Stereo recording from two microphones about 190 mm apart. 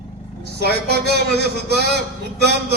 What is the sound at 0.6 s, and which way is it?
A man's voice, 60° right (ahead or behind).